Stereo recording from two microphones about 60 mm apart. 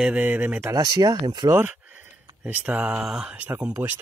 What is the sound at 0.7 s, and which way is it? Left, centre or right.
Speech, right.